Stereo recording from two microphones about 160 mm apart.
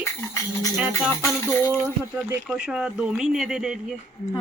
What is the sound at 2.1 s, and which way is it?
Speech, 10° right (ahead or behind).